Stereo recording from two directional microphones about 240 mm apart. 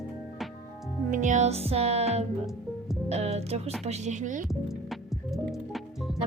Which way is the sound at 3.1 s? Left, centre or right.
Right.